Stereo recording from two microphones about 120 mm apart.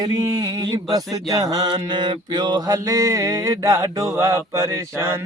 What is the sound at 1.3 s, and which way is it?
Mantra, 30° right (ahead or behind).